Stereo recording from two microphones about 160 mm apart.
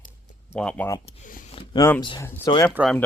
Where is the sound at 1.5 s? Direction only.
35° left (ahead or behind).